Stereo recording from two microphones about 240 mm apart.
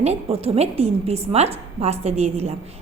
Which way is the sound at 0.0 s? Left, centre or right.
Right.